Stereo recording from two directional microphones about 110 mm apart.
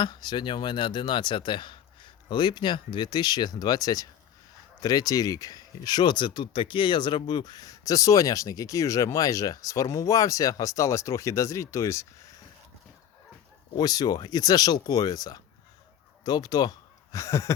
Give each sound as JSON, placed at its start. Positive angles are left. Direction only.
{"t": 0.0, "sound": "speech", "side_deg": 40}
{"t": 13.7, "sound": "speech", "side_deg": 35}